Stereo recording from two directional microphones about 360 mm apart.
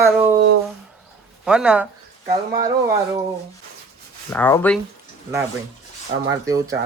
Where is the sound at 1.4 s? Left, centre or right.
Centre.